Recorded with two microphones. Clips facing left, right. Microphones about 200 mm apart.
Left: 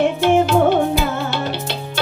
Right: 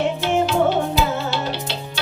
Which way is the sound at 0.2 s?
55° left (ahead or behind).